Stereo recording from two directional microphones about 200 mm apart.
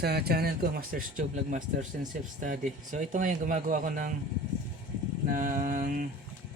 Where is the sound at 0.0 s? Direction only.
55° right (ahead or behind).